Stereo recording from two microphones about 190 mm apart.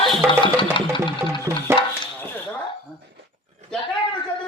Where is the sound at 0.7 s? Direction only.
25° left (ahead or behind).